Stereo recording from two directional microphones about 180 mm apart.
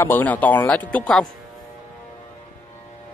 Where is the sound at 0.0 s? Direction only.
10° left (ahead or behind).